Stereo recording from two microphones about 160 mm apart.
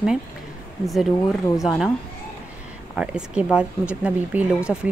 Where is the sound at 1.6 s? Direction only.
Centre (ahead or behind).